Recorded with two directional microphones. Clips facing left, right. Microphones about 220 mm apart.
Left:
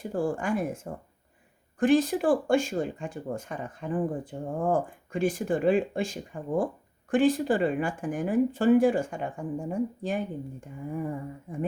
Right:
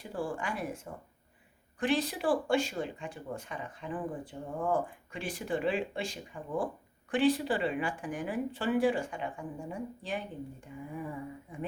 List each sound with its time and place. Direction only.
0.0 s speech: 45° left (ahead or behind)
1.8 s speech: 45° left (ahead or behind)